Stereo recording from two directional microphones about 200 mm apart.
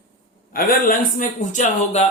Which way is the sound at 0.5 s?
45° left (ahead or behind).